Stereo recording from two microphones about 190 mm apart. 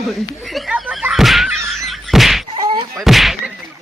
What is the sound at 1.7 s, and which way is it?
Thunk, centre (ahead or behind).